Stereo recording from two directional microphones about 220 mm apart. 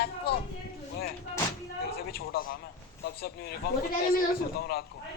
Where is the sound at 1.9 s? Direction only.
45° left (ahead or behind).